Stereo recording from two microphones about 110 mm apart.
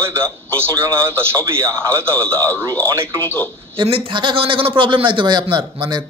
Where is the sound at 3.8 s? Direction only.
55° right (ahead or behind).